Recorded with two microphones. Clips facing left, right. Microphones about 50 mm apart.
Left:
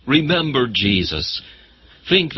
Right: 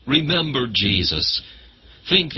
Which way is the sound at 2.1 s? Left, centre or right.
Left.